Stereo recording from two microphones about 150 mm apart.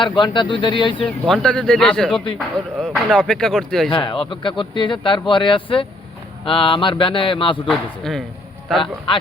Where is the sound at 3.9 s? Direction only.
30° left (ahead or behind).